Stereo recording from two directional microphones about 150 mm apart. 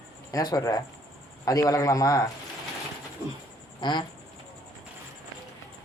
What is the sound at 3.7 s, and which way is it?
Speech, 30° left (ahead or behind).